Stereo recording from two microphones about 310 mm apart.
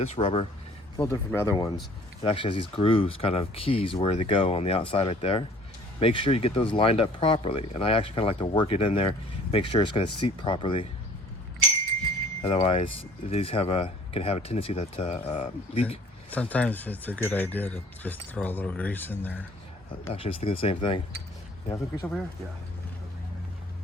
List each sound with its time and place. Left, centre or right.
0.0 s speech: centre
12.4 s speech: centre
16.3 s speech: centre
20.1 s speech: centre